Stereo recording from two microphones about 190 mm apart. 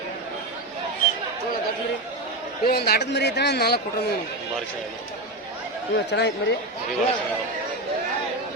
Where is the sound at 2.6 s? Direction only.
60° left (ahead or behind).